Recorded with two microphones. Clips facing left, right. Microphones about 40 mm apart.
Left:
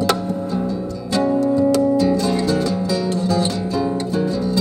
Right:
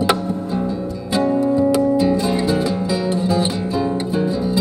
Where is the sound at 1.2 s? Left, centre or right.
Centre.